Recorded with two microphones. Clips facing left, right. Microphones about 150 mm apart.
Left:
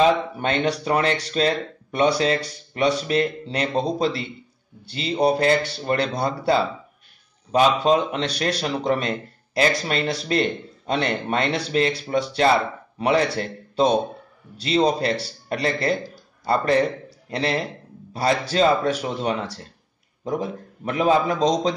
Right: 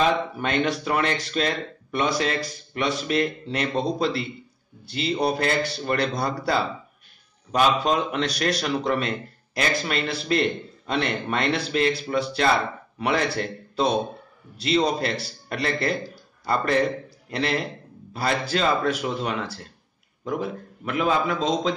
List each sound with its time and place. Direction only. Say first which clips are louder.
0.0 s a man's voice: left 4 dB; 35° left (ahead or behind)